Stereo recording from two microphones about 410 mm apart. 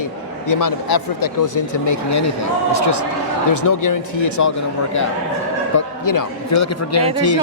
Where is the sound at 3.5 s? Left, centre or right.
Left.